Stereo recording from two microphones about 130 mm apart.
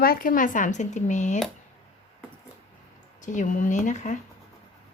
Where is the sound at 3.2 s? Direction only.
70° left (ahead or behind).